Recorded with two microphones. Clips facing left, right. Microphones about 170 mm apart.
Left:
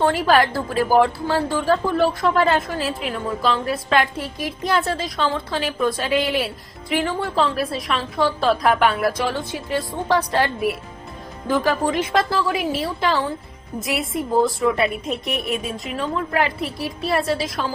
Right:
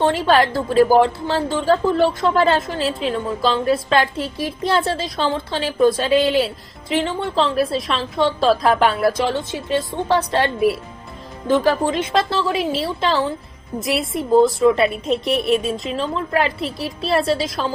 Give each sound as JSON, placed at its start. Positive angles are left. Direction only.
{"t": 0.0, "sound": "a woman's voice", "side_deg": -25}